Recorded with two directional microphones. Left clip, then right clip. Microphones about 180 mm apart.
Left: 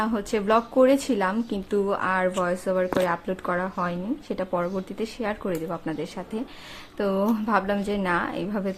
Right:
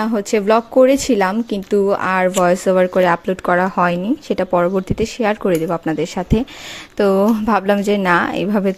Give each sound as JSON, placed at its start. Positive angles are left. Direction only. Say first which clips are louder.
{"t": 0.0, "sound": "a woman's voice", "louder": "right 8 dB", "side_deg": -40}